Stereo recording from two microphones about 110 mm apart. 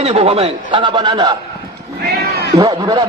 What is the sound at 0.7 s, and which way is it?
Speech, 45° right (ahead or behind).